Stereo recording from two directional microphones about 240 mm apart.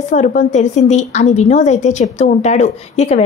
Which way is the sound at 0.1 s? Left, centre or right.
Left.